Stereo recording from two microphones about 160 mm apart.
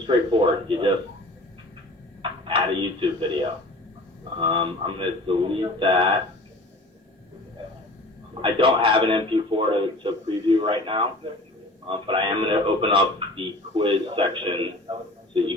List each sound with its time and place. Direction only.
0.1 s a man's voice: 30° right (ahead or behind)
2.4 s a man's voice: 30° right (ahead or behind)
8.4 s a man's voice: 30° right (ahead or behind)